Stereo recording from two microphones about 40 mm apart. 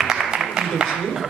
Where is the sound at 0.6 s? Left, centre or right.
Right.